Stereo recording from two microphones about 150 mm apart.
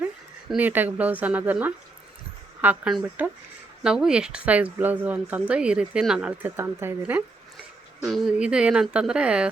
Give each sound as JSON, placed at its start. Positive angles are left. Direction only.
{"t": 0.4, "sound": "speech", "side_deg": -10}
{"t": 6.6, "sound": "speech", "side_deg": -15}
{"t": 8.0, "sound": "speech", "side_deg": 0}